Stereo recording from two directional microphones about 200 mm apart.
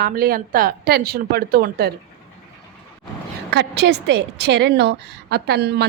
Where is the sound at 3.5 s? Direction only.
60° right (ahead or behind).